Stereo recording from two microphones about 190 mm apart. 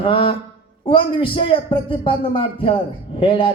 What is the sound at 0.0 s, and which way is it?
A man's voice, 30° left (ahead or behind).